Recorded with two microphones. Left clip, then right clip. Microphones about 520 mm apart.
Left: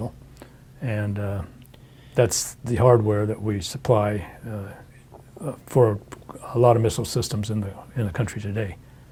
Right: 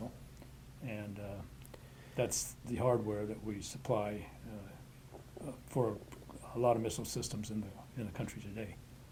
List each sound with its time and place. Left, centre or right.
0.9 s speech: left
5.6 s speech: left